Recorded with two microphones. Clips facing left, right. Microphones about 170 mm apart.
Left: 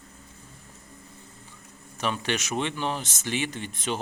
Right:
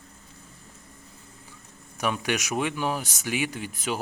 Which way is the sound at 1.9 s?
10° right (ahead or behind).